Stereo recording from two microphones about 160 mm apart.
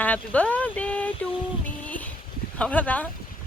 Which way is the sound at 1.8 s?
10° left (ahead or behind).